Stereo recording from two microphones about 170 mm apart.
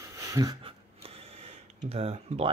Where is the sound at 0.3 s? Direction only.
20° right (ahead or behind).